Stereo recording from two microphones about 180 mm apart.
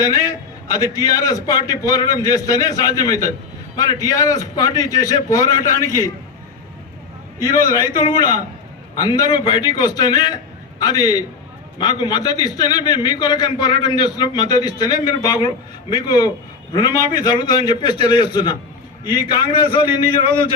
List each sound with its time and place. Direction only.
0.0 s a man's voice: 20° left (ahead or behind)
8.1 s a man's voice: 25° left (ahead or behind)